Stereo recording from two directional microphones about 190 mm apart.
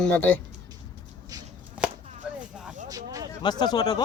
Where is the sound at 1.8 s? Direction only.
5° right (ahead or behind).